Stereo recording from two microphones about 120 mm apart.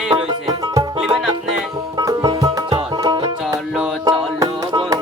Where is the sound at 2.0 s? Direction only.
30° right (ahead or behind).